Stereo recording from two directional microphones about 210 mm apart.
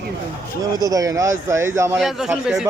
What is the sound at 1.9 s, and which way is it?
Speech, centre (ahead or behind).